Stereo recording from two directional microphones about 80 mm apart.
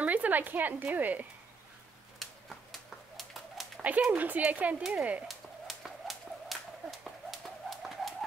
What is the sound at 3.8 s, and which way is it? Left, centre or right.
Speech, centre.